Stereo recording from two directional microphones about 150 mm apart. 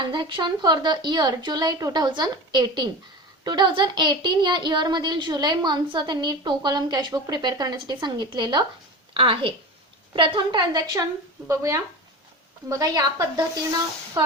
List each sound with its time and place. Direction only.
0.0 s a woman's voice: 30° right (ahead or behind)